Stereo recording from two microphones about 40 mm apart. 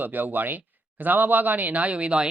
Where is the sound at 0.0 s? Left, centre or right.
Right.